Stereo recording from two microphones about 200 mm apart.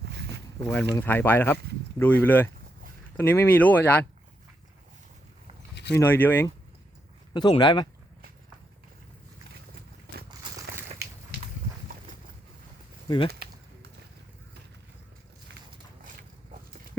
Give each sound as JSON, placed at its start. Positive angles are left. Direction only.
{"t": 0.7, "sound": "speech", "side_deg": 10}
{"t": 5.7, "sound": "a sound", "side_deg": 60}
{"t": 6.0, "sound": "speech", "side_deg": 10}
{"t": 7.3, "sound": "speech", "side_deg": 20}
{"t": 13.1, "sound": "speech", "side_deg": 25}